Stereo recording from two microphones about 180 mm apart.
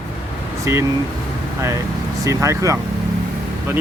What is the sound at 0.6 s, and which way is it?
Speech, 15° right (ahead or behind).